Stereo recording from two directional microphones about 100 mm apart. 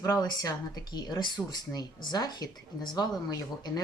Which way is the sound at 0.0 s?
30° left (ahead or behind).